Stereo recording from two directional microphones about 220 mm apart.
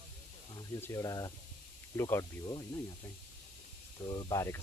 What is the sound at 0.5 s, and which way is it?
Speech, 15° left (ahead or behind).